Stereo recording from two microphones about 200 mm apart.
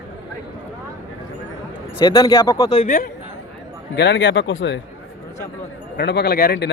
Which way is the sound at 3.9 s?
60° left (ahead or behind).